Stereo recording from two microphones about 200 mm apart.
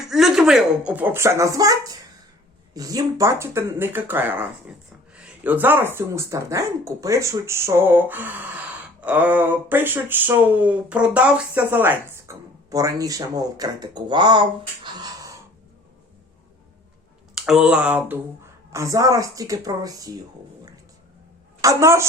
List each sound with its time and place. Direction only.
0.1 s speech: centre (ahead or behind); by 14.4 s 25° right (ahead or behind)
14.8 s gasp: 20° right (ahead or behind)
17.3 s speech: 5° right (ahead or behind)
21.6 s a woman's voice: 15° right (ahead or behind)